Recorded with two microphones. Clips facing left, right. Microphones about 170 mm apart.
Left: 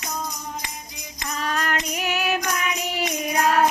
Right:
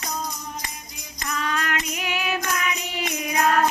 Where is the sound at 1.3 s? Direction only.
40° left (ahead or behind).